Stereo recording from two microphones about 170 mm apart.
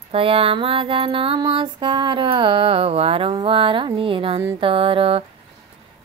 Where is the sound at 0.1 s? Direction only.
35° right (ahead or behind).